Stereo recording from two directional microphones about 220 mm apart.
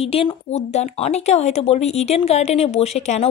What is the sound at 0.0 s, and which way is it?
Speech, 25° left (ahead or behind).